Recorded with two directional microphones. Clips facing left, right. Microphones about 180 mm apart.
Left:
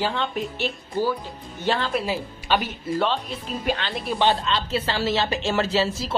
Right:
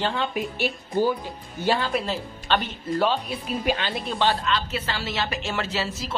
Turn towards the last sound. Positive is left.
turn(degrees=30)  # may be behind; listen again after turning